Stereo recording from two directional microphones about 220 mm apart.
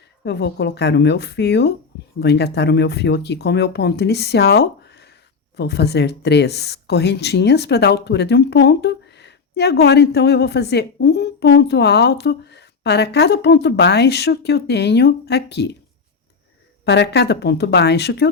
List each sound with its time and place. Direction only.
0.3 s speech: 50° left (ahead or behind)
16.8 s speech: 50° left (ahead or behind)